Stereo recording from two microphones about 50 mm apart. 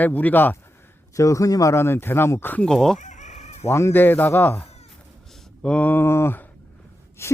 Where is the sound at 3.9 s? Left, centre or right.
Left.